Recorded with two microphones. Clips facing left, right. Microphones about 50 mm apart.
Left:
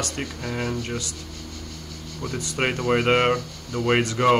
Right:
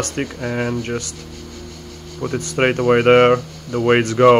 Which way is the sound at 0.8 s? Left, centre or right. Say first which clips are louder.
Right 6 dB; right.